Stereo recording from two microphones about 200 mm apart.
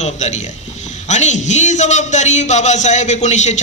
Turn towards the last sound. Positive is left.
turn(degrees=35)  # may be behind; listen again after turning